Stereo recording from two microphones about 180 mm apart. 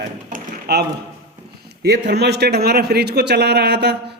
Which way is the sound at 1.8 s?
70° right (ahead or behind).